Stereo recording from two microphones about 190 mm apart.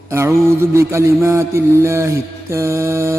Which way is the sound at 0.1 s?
15° right (ahead or behind).